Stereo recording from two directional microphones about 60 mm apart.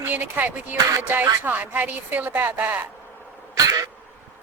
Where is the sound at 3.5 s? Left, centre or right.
Right.